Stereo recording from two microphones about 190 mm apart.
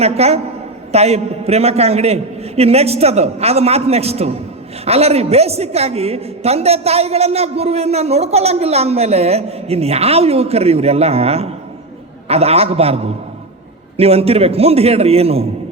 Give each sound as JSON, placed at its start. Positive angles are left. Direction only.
{"t": 0.0, "sound": "a woman's voice", "side_deg": -35}